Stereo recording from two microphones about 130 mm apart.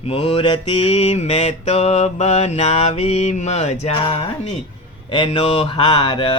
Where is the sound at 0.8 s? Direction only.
50° left (ahead or behind).